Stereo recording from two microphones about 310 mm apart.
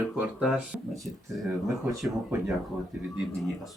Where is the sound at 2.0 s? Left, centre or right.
Centre.